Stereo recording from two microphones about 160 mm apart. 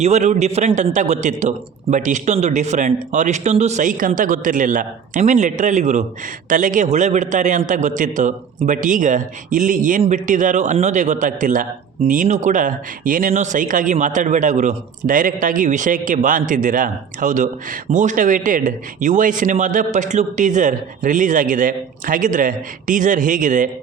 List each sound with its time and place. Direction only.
0.0 s a man's voice: 45° right (ahead or behind)